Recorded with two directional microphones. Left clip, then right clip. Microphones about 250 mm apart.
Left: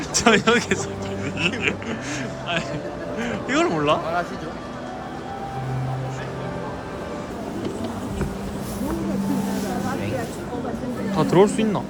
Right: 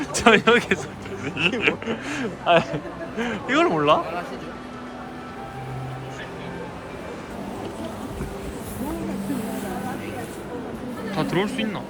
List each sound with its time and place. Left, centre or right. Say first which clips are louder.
0.1 s speech: right 1 dB; centre
11.2 s speech: left 7 dB; left